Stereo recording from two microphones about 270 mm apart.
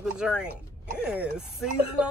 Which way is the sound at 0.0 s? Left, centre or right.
Centre.